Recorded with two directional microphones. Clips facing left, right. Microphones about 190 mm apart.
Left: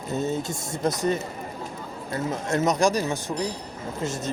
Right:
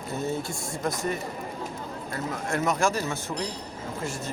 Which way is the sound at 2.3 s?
20° left (ahead or behind).